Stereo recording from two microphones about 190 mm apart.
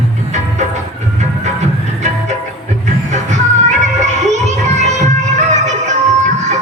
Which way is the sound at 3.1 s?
40° right (ahead or behind).